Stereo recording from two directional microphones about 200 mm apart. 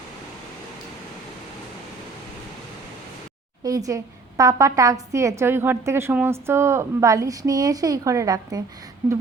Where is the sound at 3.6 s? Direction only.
15° right (ahead or behind).